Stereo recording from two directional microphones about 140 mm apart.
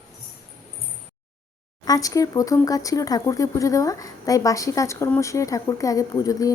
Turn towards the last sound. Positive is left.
turn(degrees=25)  # may be behind; listen again after turning